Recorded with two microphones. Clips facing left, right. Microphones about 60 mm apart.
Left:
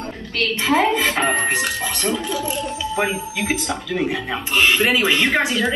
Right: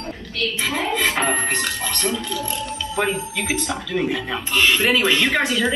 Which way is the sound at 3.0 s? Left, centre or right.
Centre.